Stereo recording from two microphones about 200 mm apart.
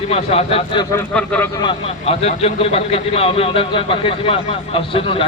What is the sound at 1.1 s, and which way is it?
Speech, 5° left (ahead or behind).